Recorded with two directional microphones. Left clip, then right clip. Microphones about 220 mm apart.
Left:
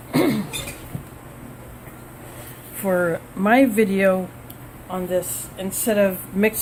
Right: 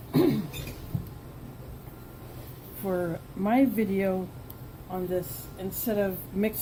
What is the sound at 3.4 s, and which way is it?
Speech, 25° left (ahead or behind).